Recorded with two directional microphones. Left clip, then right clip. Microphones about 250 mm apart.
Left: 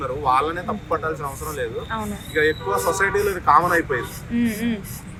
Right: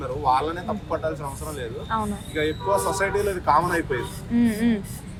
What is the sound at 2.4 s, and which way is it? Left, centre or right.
Speech, centre.